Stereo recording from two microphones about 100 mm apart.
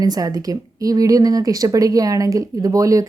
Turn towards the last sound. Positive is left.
turn(degrees=-35)  # may be behind; listen again after turning